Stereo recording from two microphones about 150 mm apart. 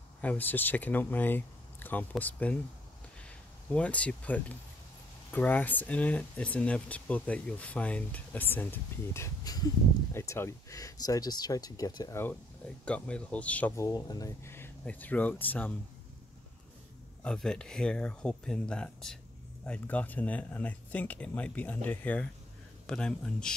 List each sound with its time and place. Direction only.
0.2 s speech: 10° left (ahead or behind)
3.7 s speech: 10° left (ahead or behind)
13.8 s speech: 25° left (ahead or behind)
17.2 s speech: 5° left (ahead or behind)